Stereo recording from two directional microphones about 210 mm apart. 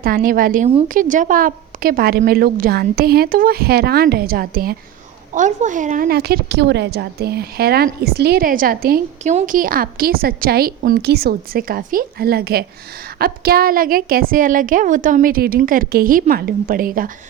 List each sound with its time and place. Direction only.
0.0 s a woman's voice: 45° right (ahead or behind)